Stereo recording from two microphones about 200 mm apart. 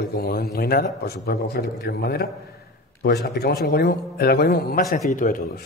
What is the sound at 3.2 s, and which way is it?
A man's voice, 50° left (ahead or behind).